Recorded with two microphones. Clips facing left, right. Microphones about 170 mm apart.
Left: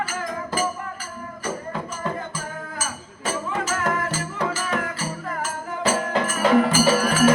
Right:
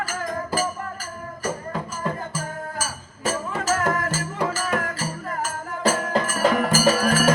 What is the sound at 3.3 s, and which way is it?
Music, 40° right (ahead or behind).